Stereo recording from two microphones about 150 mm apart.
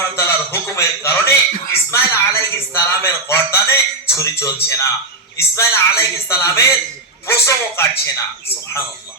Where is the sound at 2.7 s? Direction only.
20° left (ahead or behind).